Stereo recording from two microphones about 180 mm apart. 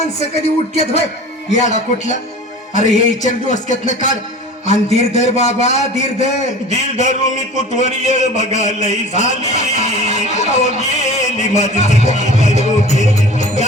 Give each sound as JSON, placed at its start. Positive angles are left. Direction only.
{"t": 0.2, "sound": "a man's voice", "side_deg": 35}